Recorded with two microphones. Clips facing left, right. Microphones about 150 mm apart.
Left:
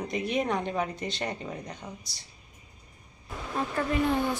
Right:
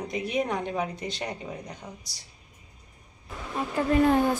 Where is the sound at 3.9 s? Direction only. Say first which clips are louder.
Right 7 dB; 45° right (ahead or behind).